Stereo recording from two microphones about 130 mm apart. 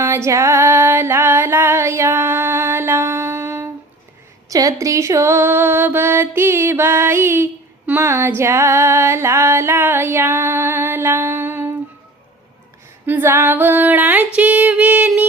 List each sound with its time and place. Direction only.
0.0 s music: 20° right (ahead or behind)
4.4 s mantra: 25° right (ahead or behind)
13.1 s female singing: 15° right (ahead or behind)